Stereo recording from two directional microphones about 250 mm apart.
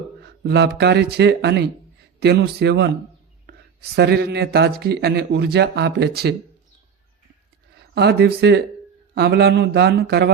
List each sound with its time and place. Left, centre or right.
0.4 s speech: right
7.9 s speech: right